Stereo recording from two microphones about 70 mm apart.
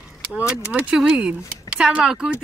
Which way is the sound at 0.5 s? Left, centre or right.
Centre.